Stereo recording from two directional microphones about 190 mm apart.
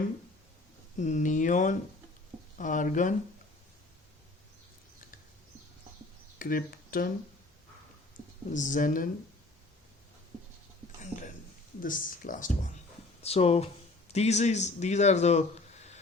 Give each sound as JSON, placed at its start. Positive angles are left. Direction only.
{"t": 0.9, "sound": "speech", "side_deg": 40}
{"t": 6.4, "sound": "speech", "side_deg": 50}
{"t": 8.4, "sound": "speech", "side_deg": 40}
{"t": 11.8, "sound": "speech", "side_deg": 45}
{"t": 13.2, "sound": "speech", "side_deg": 30}